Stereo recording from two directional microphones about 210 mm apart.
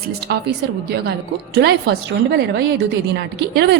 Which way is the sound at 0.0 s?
50° right (ahead or behind).